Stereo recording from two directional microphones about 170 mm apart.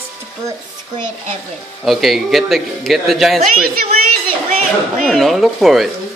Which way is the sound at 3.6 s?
60° right (ahead or behind).